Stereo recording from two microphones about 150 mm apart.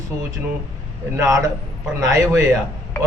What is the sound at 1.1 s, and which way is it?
A man's voice, 20° right (ahead or behind).